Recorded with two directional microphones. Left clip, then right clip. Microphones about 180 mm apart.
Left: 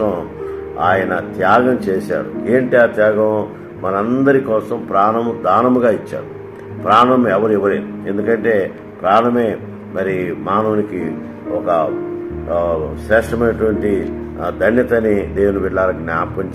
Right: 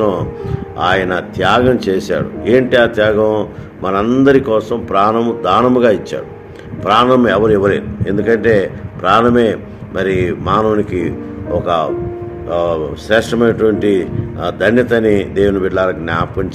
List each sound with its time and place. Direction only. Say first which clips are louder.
0.7 s speech: right 1 dB; 65° right (ahead or behind)
13.1 s a man's voice: right 2 dB; 65° right (ahead or behind)
15.7 s speech: right 1 dB; 65° right (ahead or behind)